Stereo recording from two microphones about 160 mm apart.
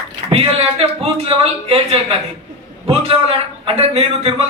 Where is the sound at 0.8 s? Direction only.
35° right (ahead or behind).